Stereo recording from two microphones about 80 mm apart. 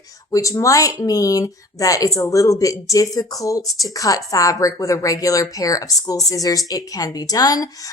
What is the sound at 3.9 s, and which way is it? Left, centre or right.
A woman's voice, left.